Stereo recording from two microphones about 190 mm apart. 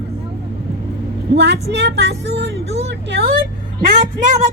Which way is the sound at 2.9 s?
55° right (ahead or behind).